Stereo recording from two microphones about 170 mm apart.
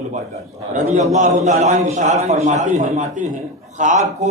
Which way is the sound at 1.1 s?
45° right (ahead or behind).